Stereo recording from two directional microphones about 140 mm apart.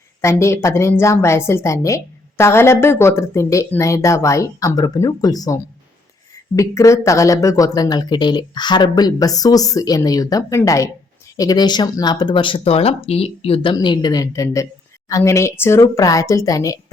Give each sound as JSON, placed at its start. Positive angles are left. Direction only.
{"t": 0.2, "sound": "speech", "side_deg": 20}
{"t": 6.6, "sound": "speech", "side_deg": 20}